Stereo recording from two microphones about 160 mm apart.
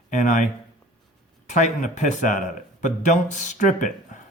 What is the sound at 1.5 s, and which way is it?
Speech, 50° left (ahead or behind).